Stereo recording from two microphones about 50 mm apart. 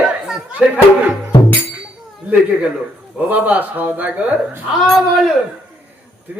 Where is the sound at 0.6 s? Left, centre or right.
Right.